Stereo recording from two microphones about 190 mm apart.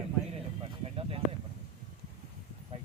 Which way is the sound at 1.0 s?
30° right (ahead or behind).